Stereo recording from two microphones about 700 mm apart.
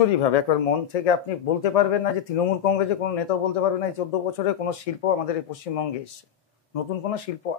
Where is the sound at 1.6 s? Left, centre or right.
Left.